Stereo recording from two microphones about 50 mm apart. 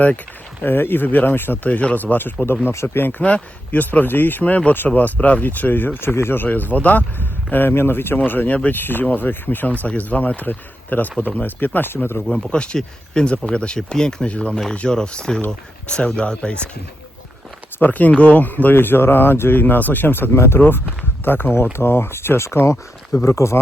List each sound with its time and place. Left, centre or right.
0.6 s speech: left
1.7 s speech: left
3.2 s speech: left
6.0 s speech: left
8.2 s speech: left
12.5 s speech: centre
17.7 s speech: left
21.2 s speech: left